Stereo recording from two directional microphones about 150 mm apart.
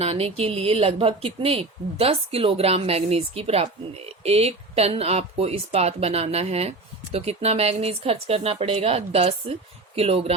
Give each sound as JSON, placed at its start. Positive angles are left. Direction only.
{"t": 0.0, "sound": "speech", "side_deg": -40}